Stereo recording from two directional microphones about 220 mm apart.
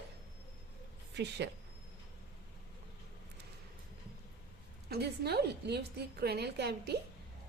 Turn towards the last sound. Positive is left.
turn(degrees=-50)  # may be behind; listen again after turning